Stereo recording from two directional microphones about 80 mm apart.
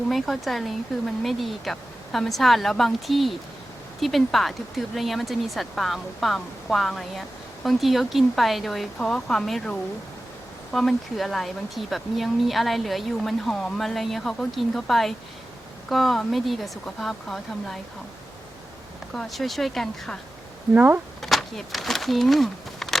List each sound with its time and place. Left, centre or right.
0.1 s a woman's voice: centre
19.1 s a woman's voice: centre
20.7 s speech: right
21.2 s a sound: centre